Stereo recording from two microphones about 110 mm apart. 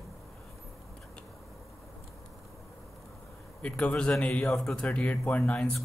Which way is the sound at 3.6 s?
10° left (ahead or behind).